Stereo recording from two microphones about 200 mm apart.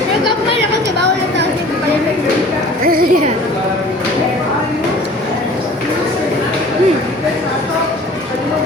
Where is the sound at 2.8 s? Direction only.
45° right (ahead or behind).